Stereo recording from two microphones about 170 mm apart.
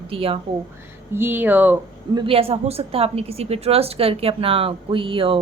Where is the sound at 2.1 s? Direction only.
35° right (ahead or behind).